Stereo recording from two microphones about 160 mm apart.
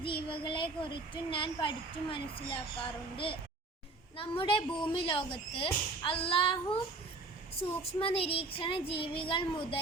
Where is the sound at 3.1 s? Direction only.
35° left (ahead or behind).